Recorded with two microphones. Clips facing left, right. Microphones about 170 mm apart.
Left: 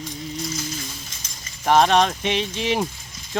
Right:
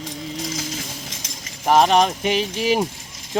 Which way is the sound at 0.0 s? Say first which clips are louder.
Right 1 dB; 90° right.